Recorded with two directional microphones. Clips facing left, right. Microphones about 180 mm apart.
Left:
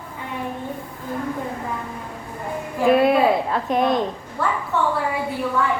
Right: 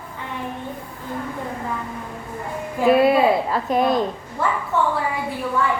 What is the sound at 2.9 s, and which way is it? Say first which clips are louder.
A woman's voice: right 1 dB; centre (ahead or behind).